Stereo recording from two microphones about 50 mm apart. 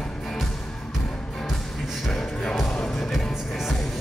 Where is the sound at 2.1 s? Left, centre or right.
Centre.